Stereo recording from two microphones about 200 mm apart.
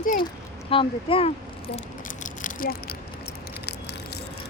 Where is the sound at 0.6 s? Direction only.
25° left (ahead or behind); by 4.2 s 55° left (ahead or behind).